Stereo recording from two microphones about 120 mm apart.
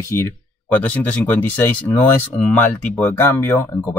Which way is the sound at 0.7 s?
10° left (ahead or behind).